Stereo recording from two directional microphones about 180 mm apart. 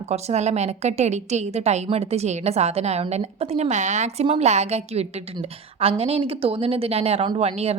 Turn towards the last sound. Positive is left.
turn(degrees=-35)  # may be behind; listen again after turning